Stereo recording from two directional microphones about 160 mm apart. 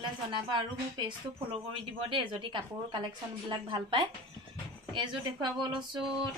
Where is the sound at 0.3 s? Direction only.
30° right (ahead or behind).